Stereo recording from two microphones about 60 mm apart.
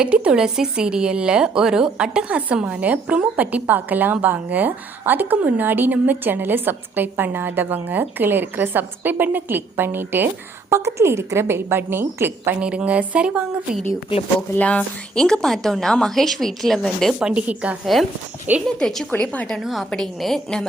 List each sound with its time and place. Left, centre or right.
0.0 s a woman's voice: centre; by 10.2 s right
10.7 s a woman's voice: right
12.5 s a woman's voice: centre
14.3 s speech: left
15.1 s a woman's voice: centre
17.2 s a woman's voice: centre
18.8 s a woman's voice: centre
19.2 s a woman's voice: left
19.6 s a woman's voice: centre